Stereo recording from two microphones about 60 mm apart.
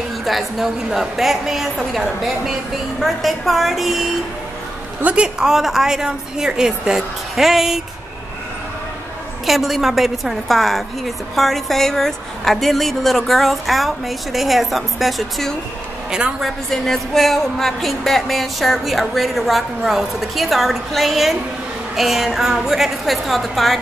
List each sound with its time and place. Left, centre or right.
0.2 s speech: centre
5.1 s a woman's voice: centre
9.5 s speech: centre
16.1 s a woman's voice: centre
16.7 s speech: centre